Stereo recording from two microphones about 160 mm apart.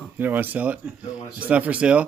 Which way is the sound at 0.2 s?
10° right (ahead or behind).